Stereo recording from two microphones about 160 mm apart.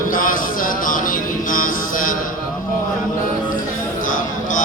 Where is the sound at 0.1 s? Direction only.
60° left (ahead or behind).